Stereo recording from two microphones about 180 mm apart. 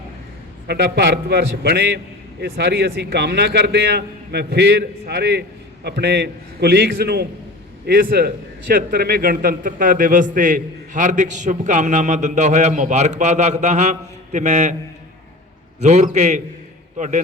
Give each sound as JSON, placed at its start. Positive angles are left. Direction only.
{"t": 0.7, "sound": "a man's voice", "side_deg": -65}
{"t": 15.8, "sound": "a man's voice", "side_deg": -40}